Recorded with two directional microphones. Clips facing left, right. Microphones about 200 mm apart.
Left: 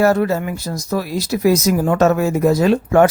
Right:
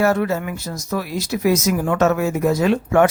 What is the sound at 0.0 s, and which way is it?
Speech, 35° left (ahead or behind).